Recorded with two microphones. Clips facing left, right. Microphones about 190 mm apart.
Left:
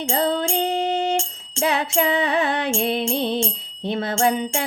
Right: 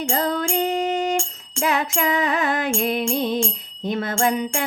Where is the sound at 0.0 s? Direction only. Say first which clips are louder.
Left 1 dB; 25° left (ahead or behind).